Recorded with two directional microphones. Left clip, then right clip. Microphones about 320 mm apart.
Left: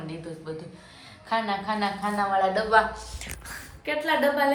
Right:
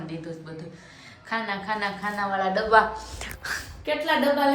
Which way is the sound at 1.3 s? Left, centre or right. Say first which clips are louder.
Left 2 dB; centre.